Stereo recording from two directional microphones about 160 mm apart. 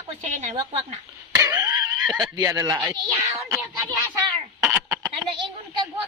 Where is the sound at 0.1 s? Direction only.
45° right (ahead or behind).